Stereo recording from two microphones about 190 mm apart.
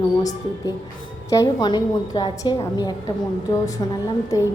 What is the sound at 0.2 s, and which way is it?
A woman's voice, 20° left (ahead or behind).